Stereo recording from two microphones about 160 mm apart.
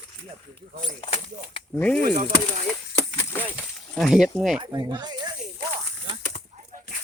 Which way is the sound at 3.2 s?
15° left (ahead or behind).